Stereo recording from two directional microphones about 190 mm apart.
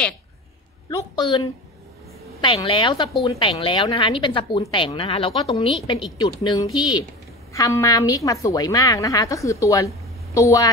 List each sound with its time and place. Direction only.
0.8 s a woman's voice: 20° left (ahead or behind)
2.4 s a woman's voice: 30° left (ahead or behind)